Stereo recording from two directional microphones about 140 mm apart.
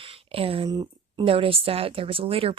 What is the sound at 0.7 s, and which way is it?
Speech, 30° right (ahead or behind).